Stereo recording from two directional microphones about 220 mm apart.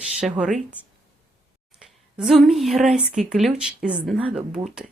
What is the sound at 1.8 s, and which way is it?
Speech, centre (ahead or behind).